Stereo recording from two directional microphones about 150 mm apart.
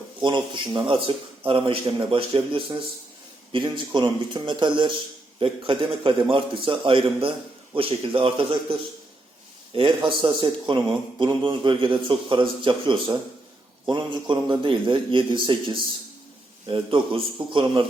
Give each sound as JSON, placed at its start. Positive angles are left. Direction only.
{"t": 0.2, "sound": "a man's voice", "side_deg": -30}
{"t": 9.7, "sound": "a man's voice", "side_deg": -35}